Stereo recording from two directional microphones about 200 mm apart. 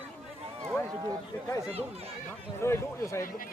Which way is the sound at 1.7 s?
30° right (ahead or behind).